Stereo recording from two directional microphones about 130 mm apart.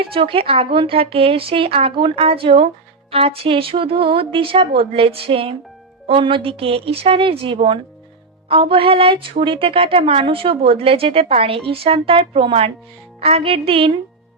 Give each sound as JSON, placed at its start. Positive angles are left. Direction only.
{"t": 0.0, "sound": "a woman's voice", "side_deg": -45}